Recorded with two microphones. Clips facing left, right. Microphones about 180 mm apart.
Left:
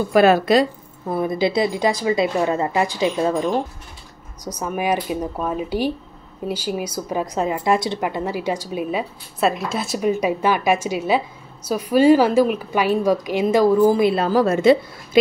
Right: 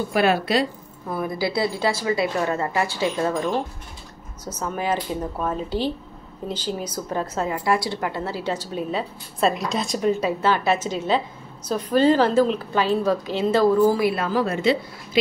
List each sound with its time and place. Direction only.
0.1 s a woman's voice: 40° left (ahead or behind)
1.0 s a woman's voice: 25° left (ahead or behind)
14.4 s a woman's voice: 45° left (ahead or behind)